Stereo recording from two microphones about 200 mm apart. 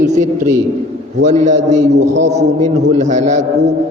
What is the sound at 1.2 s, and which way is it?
Speech, 35° right (ahead or behind).